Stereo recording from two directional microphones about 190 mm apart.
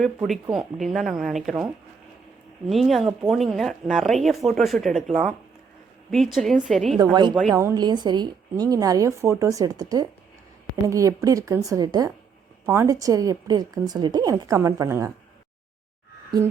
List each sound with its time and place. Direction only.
0.0 s speech: centre (ahead or behind)
2.6 s speech: centre (ahead or behind)
7.0 s a woman's voice: 20° right (ahead or behind)